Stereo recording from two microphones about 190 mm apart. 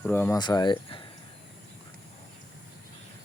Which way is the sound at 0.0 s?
10° left (ahead or behind).